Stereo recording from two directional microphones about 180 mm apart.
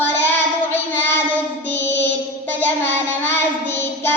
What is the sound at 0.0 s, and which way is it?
Child singing, 10° left (ahead or behind).